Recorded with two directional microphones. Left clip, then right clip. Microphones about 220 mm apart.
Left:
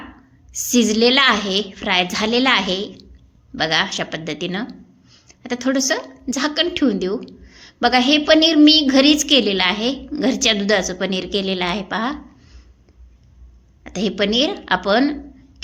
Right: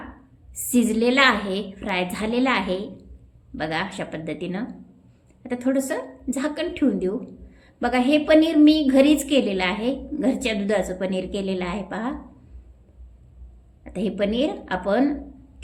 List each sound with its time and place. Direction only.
0.7 s a woman's voice: 15° left (ahead or behind)
13.8 s a woman's voice: 20° left (ahead or behind)